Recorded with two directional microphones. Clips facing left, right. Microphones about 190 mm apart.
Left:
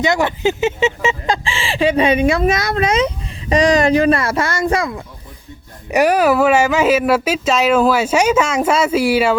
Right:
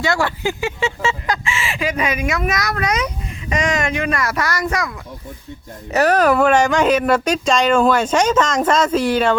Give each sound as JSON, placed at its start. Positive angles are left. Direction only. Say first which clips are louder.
{"t": 0.0, "sound": "speech", "louder": "left 4 dB", "side_deg": 20}
{"t": 1.5, "sound": "speech", "louder": "left 6 dB", "side_deg": 30}
{"t": 5.9, "sound": "speech", "louder": "left 1 dB", "side_deg": 10}